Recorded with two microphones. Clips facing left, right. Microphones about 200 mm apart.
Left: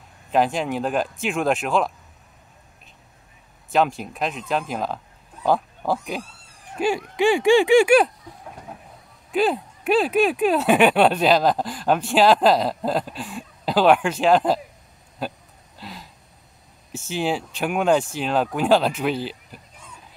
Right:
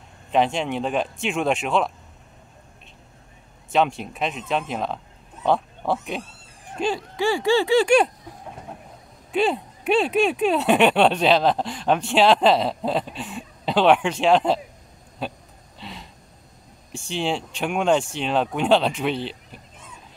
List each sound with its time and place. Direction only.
0.3 s speech: centre (ahead or behind)
3.7 s speech: centre (ahead or behind)
9.3 s speech: centre (ahead or behind)
15.8 s a sound: 5° left (ahead or behind)
16.9 s speech: 5° left (ahead or behind)